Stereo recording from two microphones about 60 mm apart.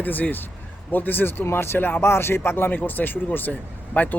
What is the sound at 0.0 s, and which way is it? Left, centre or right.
Speech, left.